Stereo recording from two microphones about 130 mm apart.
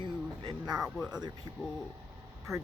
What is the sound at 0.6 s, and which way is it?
Speech, 5° right (ahead or behind).